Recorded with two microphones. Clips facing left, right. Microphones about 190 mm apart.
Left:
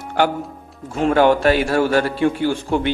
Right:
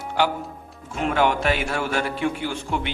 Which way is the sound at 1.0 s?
35° left (ahead or behind).